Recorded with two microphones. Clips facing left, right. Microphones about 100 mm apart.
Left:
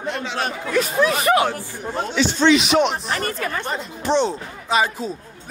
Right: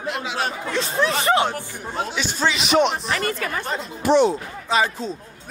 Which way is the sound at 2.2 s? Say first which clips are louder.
Left 9 dB; 5° right (ahead or behind).